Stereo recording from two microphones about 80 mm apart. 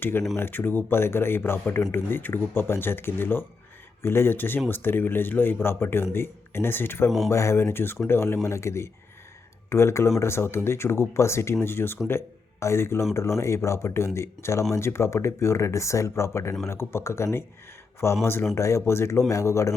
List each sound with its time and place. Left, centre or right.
0.0 s speech: left